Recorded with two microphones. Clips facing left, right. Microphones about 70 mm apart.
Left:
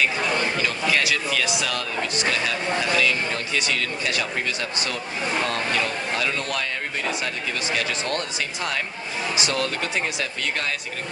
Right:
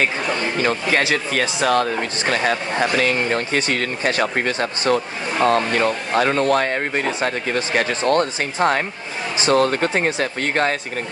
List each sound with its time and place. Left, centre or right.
0.5 s speech: right